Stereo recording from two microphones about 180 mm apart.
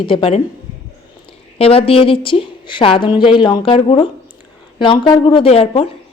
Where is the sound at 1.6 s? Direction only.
30° left (ahead or behind).